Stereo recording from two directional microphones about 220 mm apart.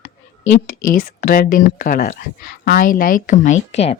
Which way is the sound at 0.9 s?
40° left (ahead or behind).